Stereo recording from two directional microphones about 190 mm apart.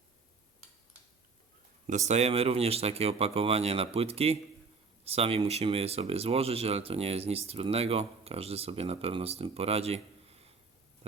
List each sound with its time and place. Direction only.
2.0 s speech: 35° right (ahead or behind)